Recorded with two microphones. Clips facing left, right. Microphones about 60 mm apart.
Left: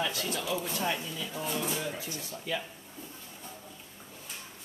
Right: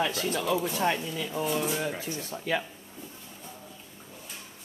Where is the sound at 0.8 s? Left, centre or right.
Right.